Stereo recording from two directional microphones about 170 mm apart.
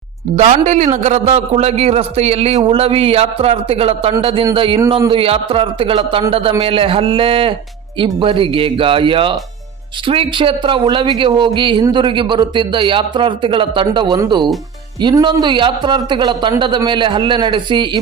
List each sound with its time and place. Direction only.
0.3 s a man's voice: 45° right (ahead or behind); by 18.0 s 25° right (ahead or behind)